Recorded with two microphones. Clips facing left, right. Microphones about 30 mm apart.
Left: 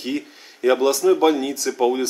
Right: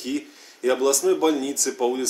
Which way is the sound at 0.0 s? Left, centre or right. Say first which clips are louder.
Left 2 dB; left.